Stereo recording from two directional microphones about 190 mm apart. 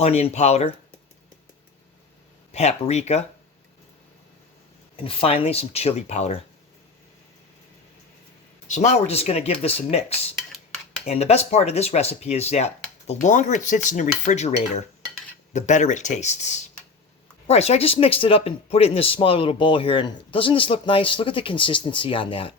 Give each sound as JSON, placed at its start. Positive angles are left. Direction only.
{"t": 0.0, "sound": "cutlery", "side_deg": 35}
{"t": 2.5, "sound": "cutlery", "side_deg": 35}
{"t": 5.0, "sound": "cutlery", "side_deg": 30}
{"t": 8.6, "sound": "cutlery", "side_deg": 40}
{"t": 17.4, "sound": "speech", "side_deg": 35}